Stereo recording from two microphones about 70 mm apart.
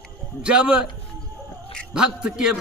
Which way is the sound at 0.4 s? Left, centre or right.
Centre.